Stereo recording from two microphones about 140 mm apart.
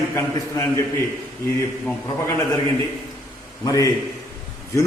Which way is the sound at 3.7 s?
25° left (ahead or behind).